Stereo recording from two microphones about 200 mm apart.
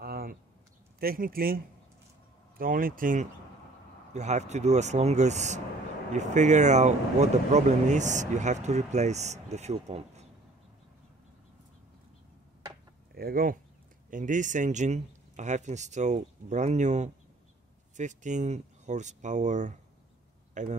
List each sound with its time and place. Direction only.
0.0 s a sound: 50° right (ahead or behind)
0.9 s speech: 45° right (ahead or behind)
13.1 s speech: 45° right (ahead or behind)